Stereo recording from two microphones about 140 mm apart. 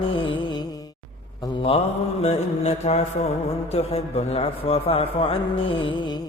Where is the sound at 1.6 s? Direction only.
50° left (ahead or behind).